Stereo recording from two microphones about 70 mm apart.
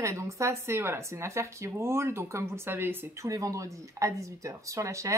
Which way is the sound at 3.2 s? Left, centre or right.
Right.